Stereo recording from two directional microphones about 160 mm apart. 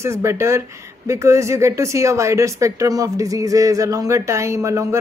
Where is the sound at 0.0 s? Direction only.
15° right (ahead or behind).